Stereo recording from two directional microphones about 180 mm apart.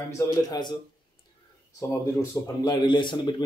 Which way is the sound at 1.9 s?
15° left (ahead or behind).